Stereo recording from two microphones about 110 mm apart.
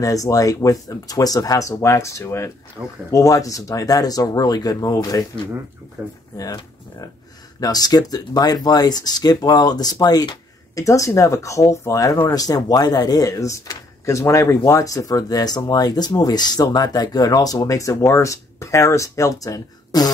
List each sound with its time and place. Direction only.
0.0 s speech: 30° left (ahead or behind)
6.0 s speech: 20° right (ahead or behind)
6.3 s speech: 35° left (ahead or behind)